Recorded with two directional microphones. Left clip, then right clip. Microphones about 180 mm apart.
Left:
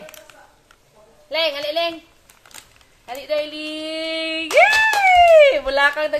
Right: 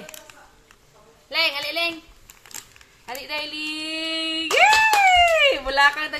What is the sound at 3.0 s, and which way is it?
Speech, 25° left (ahead or behind).